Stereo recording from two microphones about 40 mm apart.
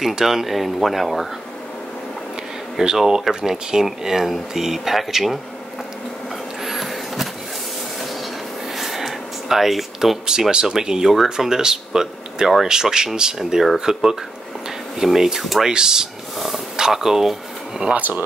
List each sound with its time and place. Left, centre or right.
0.1 s speech: centre
2.8 s speech: centre
6.6 s a sound: centre
8.7 s a sound: centre
10.5 s speech: centre
15.6 s speech: centre
16.3 s speech: centre
16.7 s speech: centre
17.9 s speech: right